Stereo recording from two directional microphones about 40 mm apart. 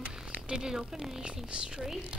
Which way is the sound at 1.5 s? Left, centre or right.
Right.